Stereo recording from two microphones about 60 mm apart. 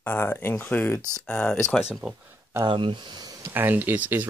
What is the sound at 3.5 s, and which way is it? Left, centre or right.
Speech, right.